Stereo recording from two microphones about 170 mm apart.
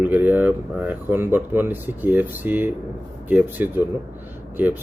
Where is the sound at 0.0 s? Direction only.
10° right (ahead or behind).